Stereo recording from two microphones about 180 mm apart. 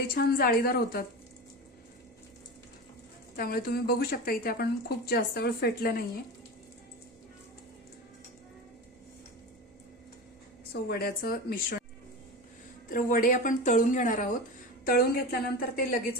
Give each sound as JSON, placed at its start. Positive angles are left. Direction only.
{"t": 0.1, "sound": "a woman's voice", "side_deg": 55}
{"t": 3.3, "sound": "a woman's voice", "side_deg": 55}
{"t": 10.7, "sound": "a woman's voice", "side_deg": 60}
{"t": 12.9, "sound": "a woman's voice", "side_deg": 50}
{"t": 14.8, "sound": "a woman's voice", "side_deg": 60}